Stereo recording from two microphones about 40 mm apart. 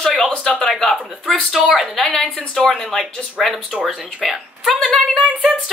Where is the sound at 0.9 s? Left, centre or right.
Centre.